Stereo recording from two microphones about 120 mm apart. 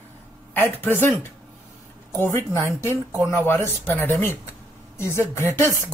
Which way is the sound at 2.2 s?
25° left (ahead or behind).